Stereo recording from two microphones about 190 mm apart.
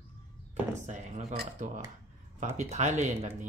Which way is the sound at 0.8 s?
40° right (ahead or behind).